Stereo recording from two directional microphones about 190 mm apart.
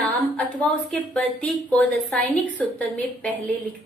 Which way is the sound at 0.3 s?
5° left (ahead or behind).